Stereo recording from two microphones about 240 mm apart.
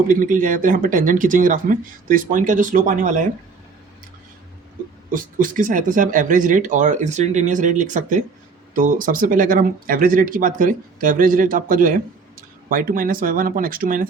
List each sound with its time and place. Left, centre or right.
0.1 s speech: right
5.1 s speech: right